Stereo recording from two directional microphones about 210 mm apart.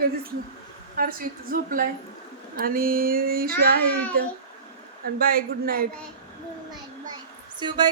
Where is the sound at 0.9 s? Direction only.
45° right (ahead or behind).